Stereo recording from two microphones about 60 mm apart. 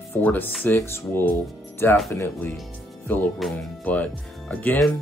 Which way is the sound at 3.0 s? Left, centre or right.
Left.